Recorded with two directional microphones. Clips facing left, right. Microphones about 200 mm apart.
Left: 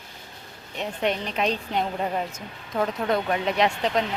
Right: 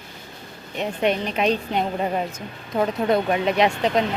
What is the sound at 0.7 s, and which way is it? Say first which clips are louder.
A woman's voice: right 4 dB; 10° right (ahead or behind).